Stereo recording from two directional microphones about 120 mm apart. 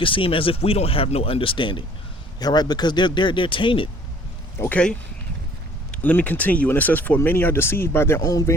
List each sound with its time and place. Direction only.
0.0 s speech: 45° left (ahead or behind)
4.6 s speech: 10° left (ahead or behind)
8.2 s speech: 30° left (ahead or behind)